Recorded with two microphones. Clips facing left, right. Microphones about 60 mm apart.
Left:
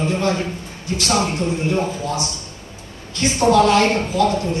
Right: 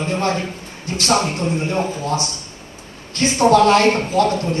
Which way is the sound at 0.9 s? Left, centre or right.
Right.